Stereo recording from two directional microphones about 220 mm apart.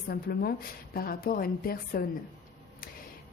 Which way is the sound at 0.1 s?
45° left (ahead or behind).